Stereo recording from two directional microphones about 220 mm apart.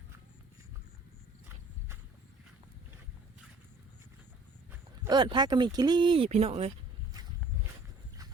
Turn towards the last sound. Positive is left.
turn(degrees=-30)  # may be behind; listen again after turning